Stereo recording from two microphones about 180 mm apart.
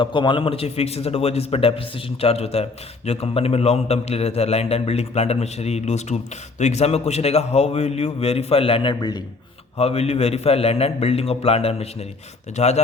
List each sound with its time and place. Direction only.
0.0 s a man's voice: 25° left (ahead or behind)
9.7 s a man's voice: 35° left (ahead or behind)